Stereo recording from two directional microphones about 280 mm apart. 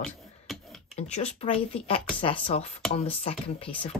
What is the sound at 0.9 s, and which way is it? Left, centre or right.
Speech, left.